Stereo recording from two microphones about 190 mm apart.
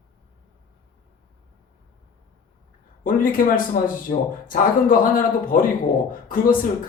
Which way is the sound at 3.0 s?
45° left (ahead or behind).